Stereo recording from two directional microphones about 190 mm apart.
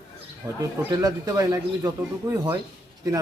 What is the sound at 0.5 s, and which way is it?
Speech, 15° right (ahead or behind).